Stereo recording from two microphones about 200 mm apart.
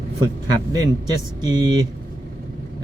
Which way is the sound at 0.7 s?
20° right (ahead or behind).